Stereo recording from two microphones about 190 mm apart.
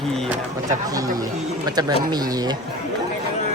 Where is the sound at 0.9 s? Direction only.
20° right (ahead or behind).